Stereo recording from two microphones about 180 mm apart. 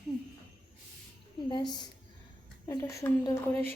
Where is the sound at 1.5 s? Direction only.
25° left (ahead or behind).